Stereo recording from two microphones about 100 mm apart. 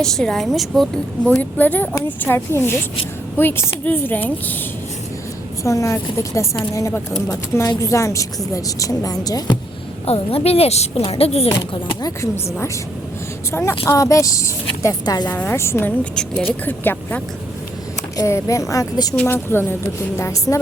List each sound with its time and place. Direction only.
0.0 s a woman's voice: 5° left (ahead or behind)
1.4 s speech: 15° left (ahead or behind)
5.6 s a woman's voice: 30° left (ahead or behind)
10.1 s a woman's voice: 85° left
12.0 s a woman's voice: 30° left (ahead or behind)
15.3 s speech: 20° left (ahead or behind)
18.2 s a woman's voice: 30° left (ahead or behind)
19.1 s speech: 20° left (ahead or behind)